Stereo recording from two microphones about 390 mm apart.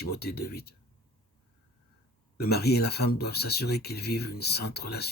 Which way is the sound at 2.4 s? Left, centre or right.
Left.